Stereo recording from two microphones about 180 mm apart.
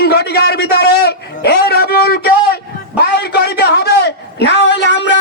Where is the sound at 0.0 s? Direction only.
60° left (ahead or behind).